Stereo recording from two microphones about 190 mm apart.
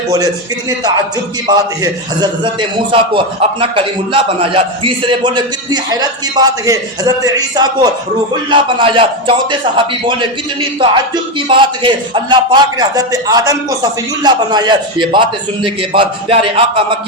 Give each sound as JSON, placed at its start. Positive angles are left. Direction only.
{"t": 0.7, "sound": "a man's voice", "side_deg": -20}